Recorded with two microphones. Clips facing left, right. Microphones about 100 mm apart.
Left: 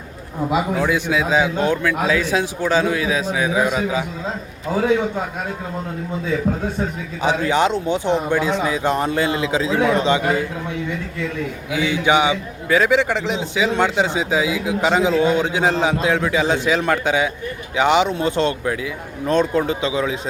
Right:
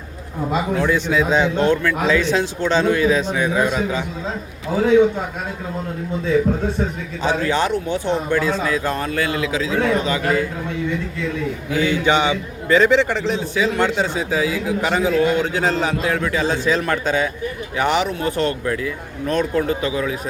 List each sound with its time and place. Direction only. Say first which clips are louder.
0.5 s a man's voice: even; 10° left (ahead or behind)
7.2 s speech: left 2 dB; 15° left (ahead or behind)
11.7 s a man's voice: even; 10° left (ahead or behind)